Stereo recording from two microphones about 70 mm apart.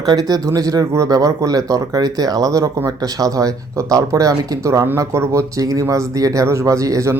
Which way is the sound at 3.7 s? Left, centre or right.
Right.